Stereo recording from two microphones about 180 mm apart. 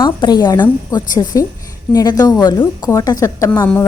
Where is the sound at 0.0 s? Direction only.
25° left (ahead or behind).